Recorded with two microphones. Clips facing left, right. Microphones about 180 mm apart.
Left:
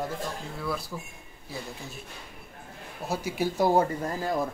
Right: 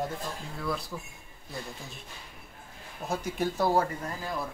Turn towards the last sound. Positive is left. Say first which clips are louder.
# left 6 dB
turn(degrees=40)  # may be behind; listen again after turning